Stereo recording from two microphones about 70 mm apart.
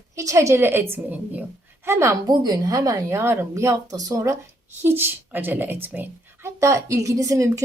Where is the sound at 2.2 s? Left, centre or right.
Right.